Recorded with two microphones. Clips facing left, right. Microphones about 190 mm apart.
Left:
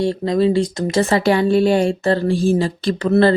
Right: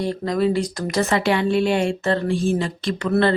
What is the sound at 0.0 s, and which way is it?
Speech, 30° left (ahead or behind).